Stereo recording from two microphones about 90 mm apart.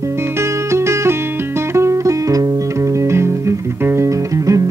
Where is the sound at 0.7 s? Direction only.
30° right (ahead or behind).